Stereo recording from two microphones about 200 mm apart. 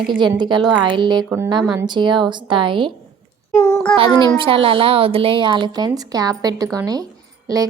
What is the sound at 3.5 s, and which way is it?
Speech, 15° left (ahead or behind).